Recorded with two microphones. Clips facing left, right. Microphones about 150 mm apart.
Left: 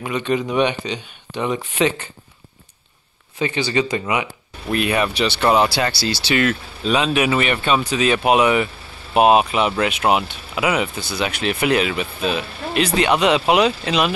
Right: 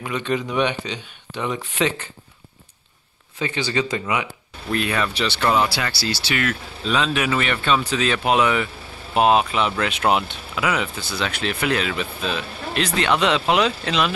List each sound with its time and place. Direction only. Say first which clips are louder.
0.0 s speech: left 3 dB; 15° left (ahead or behind)
3.3 s speech: left 3 dB; 15° left (ahead or behind)
6.8 s speech: left 4 dB; 15° left (ahead or behind)